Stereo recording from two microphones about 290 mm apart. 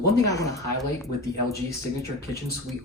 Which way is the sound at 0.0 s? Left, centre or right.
Left.